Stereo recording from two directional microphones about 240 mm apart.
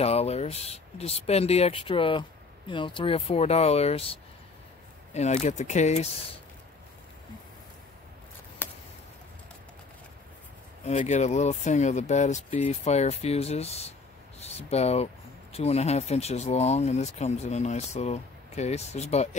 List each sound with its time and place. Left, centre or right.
0.0 s speech: left
10.9 s speech: left